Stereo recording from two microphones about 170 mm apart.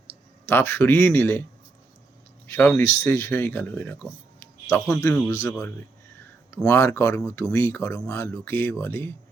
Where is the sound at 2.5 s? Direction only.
10° left (ahead or behind).